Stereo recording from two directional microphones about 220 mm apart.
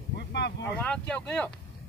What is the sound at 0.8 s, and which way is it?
Speech, 5° left (ahead or behind).